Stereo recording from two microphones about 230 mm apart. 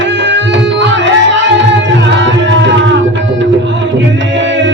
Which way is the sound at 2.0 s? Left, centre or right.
Right.